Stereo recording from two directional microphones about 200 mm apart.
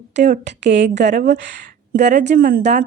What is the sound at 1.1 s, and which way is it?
Speech, 40° right (ahead or behind).